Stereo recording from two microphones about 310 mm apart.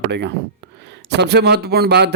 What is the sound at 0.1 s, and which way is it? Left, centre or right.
Speech, right.